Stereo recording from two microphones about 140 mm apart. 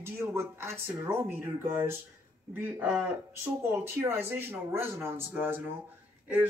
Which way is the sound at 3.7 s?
15° right (ahead or behind).